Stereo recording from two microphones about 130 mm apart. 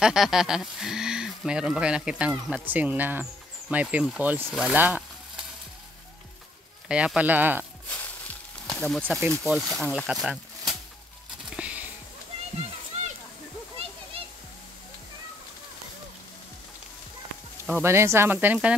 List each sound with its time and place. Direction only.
0.0 s speech: 5° right (ahead or behind)
6.9 s speech: 10° right (ahead or behind)
7.9 s sizzle: 10° left (ahead or behind)
8.8 s speech: centre (ahead or behind)
11.5 s a sound: 10° right (ahead or behind)
17.8 s speech: 20° right (ahead or behind)